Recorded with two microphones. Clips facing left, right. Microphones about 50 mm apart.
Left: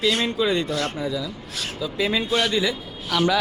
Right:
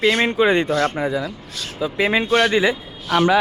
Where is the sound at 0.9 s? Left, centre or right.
Right.